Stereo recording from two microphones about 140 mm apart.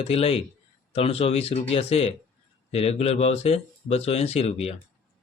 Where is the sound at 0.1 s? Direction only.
45° left (ahead or behind).